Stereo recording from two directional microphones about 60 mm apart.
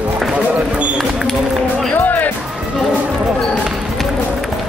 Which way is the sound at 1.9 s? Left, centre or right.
Left.